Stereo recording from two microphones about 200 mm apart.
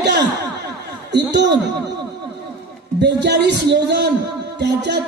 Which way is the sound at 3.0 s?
60° right (ahead or behind).